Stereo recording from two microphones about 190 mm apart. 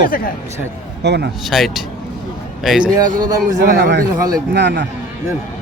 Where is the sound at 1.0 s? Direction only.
65° right (ahead or behind).